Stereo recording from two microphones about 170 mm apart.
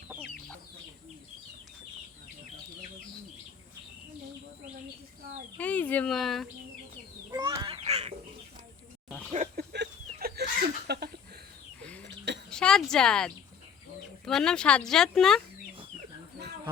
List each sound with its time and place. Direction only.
5.5 s speech: 10° left (ahead or behind)
7.3 s fowl: 25° right (ahead or behind)
9.0 s a sound: 5° left (ahead or behind)
9.6 s a sound: 70° right (ahead or behind)
11.8 s chicken: 10° left (ahead or behind)
12.0 s cough: 90° right
12.5 s speech: 5° left (ahead or behind)